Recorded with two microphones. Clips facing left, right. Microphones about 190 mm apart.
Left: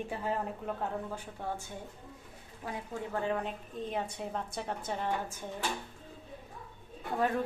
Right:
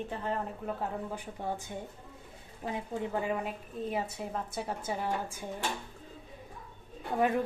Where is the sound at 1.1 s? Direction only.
15° right (ahead or behind).